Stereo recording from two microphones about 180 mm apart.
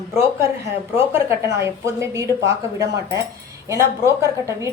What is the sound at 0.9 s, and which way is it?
Speech, 15° right (ahead or behind).